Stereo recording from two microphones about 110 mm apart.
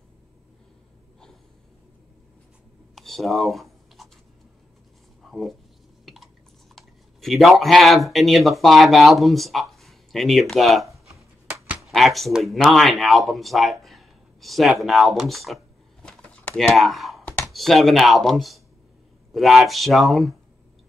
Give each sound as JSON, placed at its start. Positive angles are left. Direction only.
{"t": 2.9, "sound": "computer keyboard", "side_deg": 0}
{"t": 5.3, "sound": "speech", "side_deg": 0}
{"t": 6.7, "sound": "speech", "side_deg": 0}
{"t": 11.1, "sound": "a sound", "side_deg": -25}
{"t": 11.8, "sound": "speech", "side_deg": 0}